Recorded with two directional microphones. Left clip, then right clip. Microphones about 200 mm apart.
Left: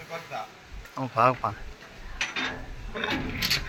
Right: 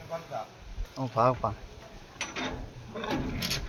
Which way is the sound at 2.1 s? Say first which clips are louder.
Left 6 dB; 60° right (ahead or behind).